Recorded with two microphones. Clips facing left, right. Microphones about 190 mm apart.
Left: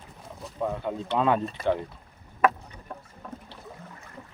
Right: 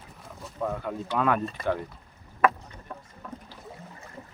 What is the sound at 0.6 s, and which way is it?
Speech, 20° left (ahead or behind).